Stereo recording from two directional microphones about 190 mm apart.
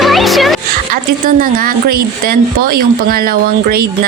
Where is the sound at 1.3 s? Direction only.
50° right (ahead or behind).